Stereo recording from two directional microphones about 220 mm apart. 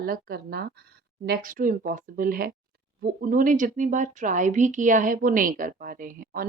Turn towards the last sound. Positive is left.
turn(degrees=-40)  # may be behind; listen again after turning